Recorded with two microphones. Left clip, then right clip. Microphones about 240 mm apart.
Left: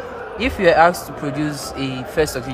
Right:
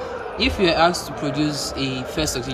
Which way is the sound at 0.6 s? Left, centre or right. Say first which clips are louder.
Left 6 dB; centre.